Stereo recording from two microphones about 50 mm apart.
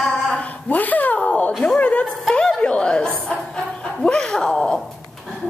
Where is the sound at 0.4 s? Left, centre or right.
Left.